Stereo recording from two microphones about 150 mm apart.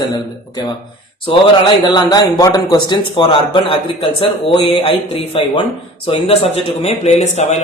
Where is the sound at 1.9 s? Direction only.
25° left (ahead or behind).